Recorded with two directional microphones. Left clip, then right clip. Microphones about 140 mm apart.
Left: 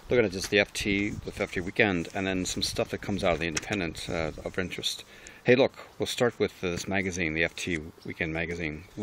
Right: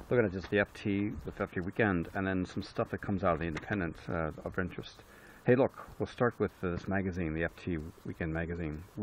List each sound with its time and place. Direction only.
0.1 s speech: 25° left (ahead or behind)
2.9 s speech: 30° left (ahead or behind)